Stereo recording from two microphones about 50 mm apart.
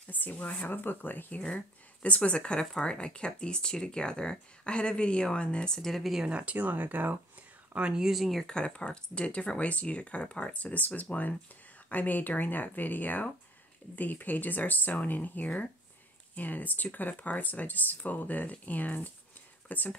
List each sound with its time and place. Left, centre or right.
0.1 s speech: left
2.0 s speech: left
5.9 s speech: centre
6.2 s speech: right
7.9 s speech: centre
8.4 s speech: centre; by 20.0 s left